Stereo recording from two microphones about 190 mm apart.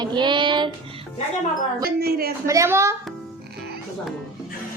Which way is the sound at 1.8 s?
55° right (ahead or behind).